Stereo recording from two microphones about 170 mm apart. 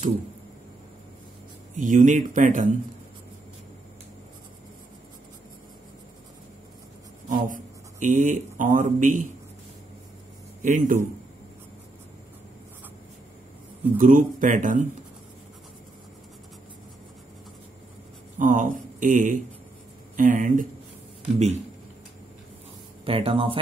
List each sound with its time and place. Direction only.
1.8 s speech: 50° right (ahead or behind)
7.2 s speech: 50° right (ahead or behind)
10.6 s speech: 50° right (ahead or behind)
13.9 s speech: 50° right (ahead or behind)
18.4 s speech: 50° right (ahead or behind)
23.0 s speech: 30° right (ahead or behind)